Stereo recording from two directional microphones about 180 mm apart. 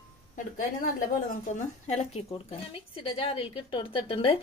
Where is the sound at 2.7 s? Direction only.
30° left (ahead or behind).